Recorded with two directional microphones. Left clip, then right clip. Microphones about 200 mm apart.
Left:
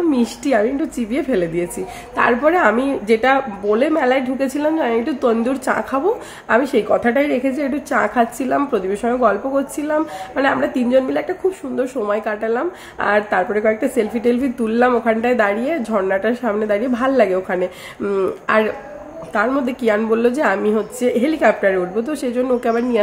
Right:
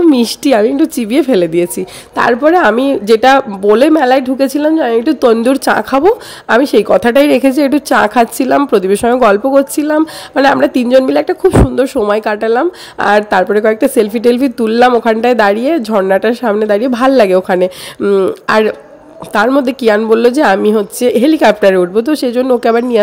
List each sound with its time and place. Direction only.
0.1 s a woman's voice: 50° right (ahead or behind)